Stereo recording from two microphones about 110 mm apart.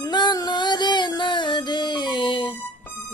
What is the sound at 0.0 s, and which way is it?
Music, 40° left (ahead or behind).